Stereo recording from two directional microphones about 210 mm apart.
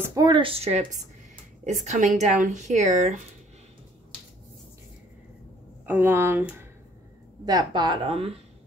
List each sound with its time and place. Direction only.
0.1 s speech: 20° right (ahead or behind); by 3.2 s 35° right (ahead or behind)
5.9 s speech: 10° right (ahead or behind); by 8.4 s 25° right (ahead or behind)